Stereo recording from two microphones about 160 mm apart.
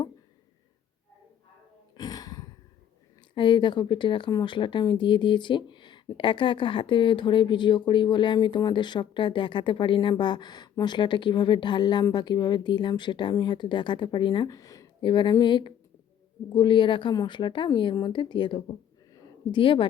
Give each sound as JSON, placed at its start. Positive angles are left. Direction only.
{"t": 2.0, "sound": "throat clearing", "side_deg": 25}
{"t": 3.3, "sound": "speech", "side_deg": 30}